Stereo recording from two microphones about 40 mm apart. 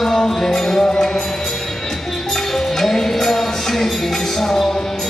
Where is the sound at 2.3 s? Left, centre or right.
Centre.